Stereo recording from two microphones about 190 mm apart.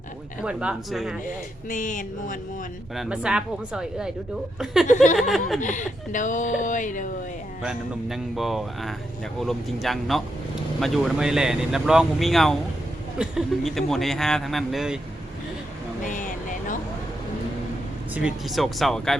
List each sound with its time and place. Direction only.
0.4 s speech: 5° right (ahead or behind)
1.7 s music: 40° left (ahead or behind)
2.9 s speech: 5° right (ahead or behind)
5.5 s speech: 40° left (ahead or behind)
7.6 s speech: centre (ahead or behind)
16.0 s a sound: 45° left (ahead or behind)
18.1 s speech: 5° right (ahead or behind)